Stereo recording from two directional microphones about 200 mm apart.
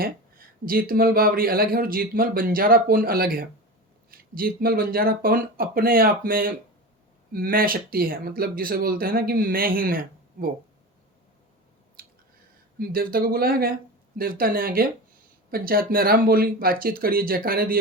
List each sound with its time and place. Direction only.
0.0 s speech: 45° right (ahead or behind)
12.0 s chewing: 45° right (ahead or behind)
12.8 s speech: 45° right (ahead or behind)